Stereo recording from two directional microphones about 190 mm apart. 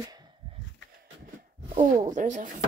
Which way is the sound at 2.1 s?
40° right (ahead or behind).